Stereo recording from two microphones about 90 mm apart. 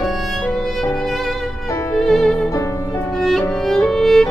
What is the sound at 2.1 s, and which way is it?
Music, 5° left (ahead or behind).